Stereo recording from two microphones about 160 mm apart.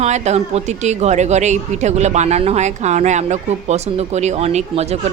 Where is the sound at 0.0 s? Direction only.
45° right (ahead or behind).